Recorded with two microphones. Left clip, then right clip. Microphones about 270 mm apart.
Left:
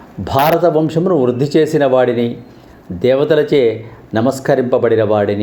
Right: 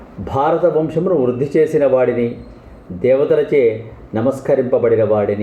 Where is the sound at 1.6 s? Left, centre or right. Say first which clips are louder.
Even; left.